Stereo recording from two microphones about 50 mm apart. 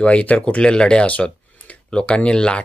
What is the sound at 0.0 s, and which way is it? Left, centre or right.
Speech, left.